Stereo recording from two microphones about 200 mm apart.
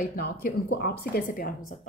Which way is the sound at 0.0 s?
45° left (ahead or behind).